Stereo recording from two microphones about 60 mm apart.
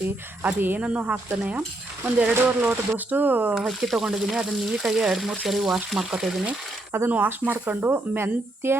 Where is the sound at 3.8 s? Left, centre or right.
Centre.